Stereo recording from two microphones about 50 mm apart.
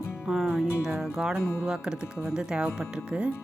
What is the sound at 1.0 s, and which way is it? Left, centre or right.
A woman's voice, centre.